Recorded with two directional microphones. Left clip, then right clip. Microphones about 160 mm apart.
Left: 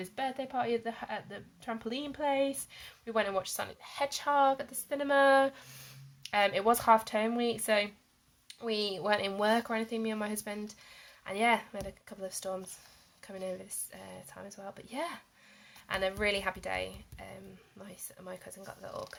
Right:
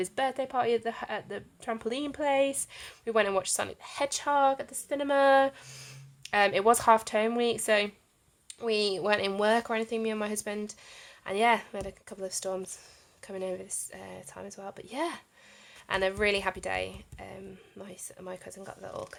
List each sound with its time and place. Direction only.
0.0 s a woman's voice: 45° right (ahead or behind)